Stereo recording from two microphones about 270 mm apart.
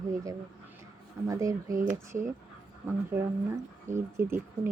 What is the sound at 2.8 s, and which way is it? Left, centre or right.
Speech, centre.